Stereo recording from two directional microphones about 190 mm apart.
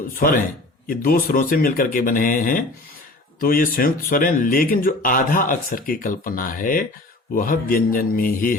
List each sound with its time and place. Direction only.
0.2 s speech: 45° left (ahead or behind)